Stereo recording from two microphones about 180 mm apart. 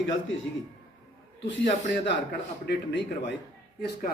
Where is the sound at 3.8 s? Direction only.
60° left (ahead or behind).